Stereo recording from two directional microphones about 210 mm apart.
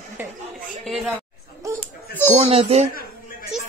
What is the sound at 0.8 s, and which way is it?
Chatter, centre (ahead or behind).